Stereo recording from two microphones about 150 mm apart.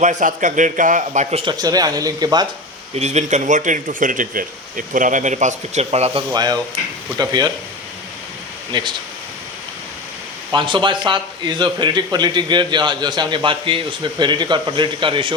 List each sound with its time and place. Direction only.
0.0 s speech: 55° right (ahead or behind)
1.5 s speech: 25° right (ahead or behind)
2.9 s speech: 50° right (ahead or behind)
6.3 s speech: 25° right (ahead or behind)
8.7 s a man's voice: 30° right (ahead or behind)
10.5 s a man's voice: 30° right (ahead or behind)